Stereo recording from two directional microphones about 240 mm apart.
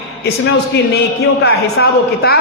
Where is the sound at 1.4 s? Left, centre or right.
Left.